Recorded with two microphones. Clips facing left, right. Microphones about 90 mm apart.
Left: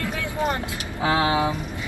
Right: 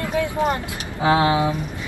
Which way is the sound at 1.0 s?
30° right (ahead or behind).